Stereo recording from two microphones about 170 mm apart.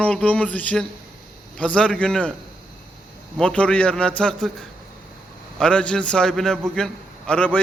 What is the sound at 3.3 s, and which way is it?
A man's voice, 5° left (ahead or behind).